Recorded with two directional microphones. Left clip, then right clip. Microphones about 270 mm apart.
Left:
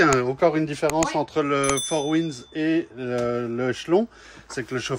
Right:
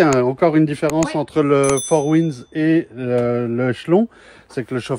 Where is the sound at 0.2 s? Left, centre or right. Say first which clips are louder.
Right 6 dB; right.